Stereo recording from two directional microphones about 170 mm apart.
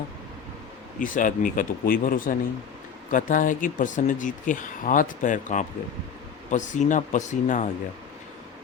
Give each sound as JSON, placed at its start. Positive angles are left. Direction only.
{"t": 0.9, "sound": "speech", "side_deg": 50}